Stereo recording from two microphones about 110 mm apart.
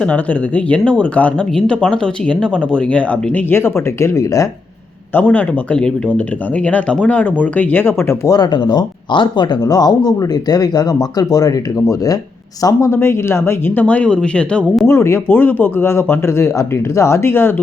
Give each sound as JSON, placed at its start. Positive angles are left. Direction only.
{"t": 0.0, "sound": "speech", "side_deg": 15}
{"t": 5.1, "sound": "a man's voice", "side_deg": 15}
{"t": 14.8, "sound": "a man's voice", "side_deg": 25}